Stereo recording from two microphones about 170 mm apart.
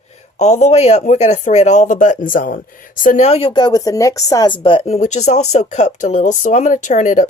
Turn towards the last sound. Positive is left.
turn(degrees=45)  # may be behind; listen again after turning